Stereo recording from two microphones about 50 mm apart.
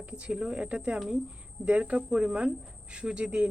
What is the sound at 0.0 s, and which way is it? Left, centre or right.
Speech, right.